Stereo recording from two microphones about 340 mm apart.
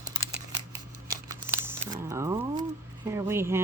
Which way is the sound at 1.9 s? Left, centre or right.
Centre.